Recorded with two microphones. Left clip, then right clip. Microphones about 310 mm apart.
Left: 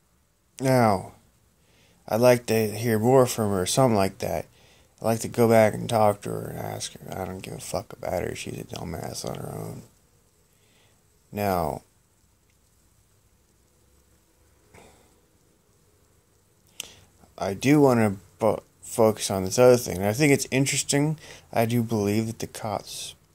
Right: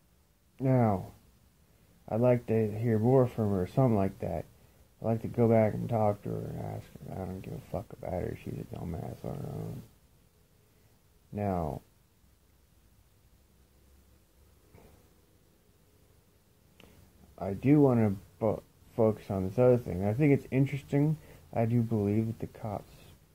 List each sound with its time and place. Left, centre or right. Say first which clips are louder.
0.6 s speech: left 8 dB; centre
11.3 s speech: left 8 dB; centre
17.4 s speech: left 6 dB; centre